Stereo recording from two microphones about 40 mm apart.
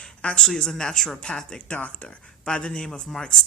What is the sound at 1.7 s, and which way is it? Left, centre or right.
Speech, left.